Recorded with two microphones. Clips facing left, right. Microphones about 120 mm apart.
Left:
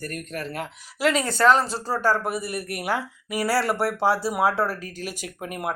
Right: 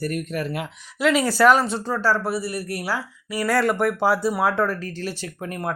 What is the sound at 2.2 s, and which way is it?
A man's voice, 20° left (ahead or behind).